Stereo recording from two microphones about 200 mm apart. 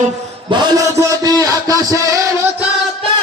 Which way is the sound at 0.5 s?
20° right (ahead or behind).